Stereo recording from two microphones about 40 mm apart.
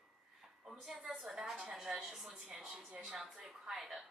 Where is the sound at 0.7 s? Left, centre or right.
Centre.